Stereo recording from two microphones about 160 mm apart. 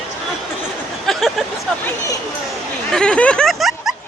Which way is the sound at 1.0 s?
Centre (ahead or behind).